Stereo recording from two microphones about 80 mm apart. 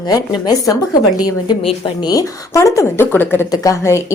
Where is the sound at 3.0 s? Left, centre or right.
Left.